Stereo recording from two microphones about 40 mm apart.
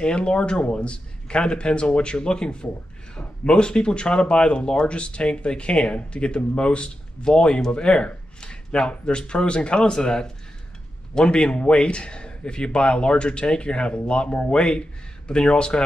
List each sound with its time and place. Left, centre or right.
0.0 s speech: left